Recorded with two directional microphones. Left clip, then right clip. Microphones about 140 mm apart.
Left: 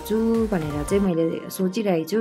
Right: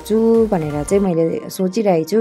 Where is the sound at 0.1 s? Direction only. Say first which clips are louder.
Right 9 dB; 30° right (ahead or behind).